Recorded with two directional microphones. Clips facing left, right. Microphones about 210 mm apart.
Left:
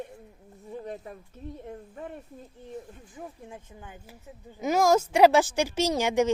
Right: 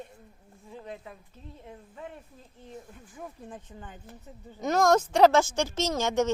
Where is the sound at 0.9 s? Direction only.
40° left (ahead or behind).